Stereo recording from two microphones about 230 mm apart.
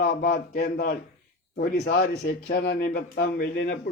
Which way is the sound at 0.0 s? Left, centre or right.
Left.